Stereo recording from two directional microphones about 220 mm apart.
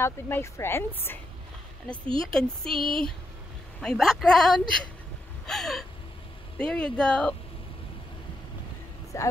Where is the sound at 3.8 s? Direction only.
Centre (ahead or behind).